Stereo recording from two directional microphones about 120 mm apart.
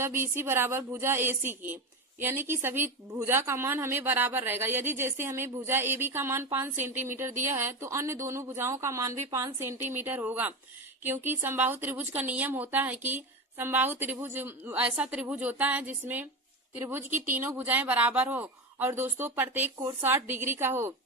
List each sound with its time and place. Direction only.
0.0 s a woman's voice: 20° right (ahead or behind)